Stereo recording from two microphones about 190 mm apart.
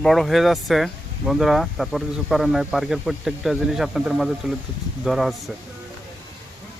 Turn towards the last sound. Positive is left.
turn(degrees=0)  # may be behind; listen again after turning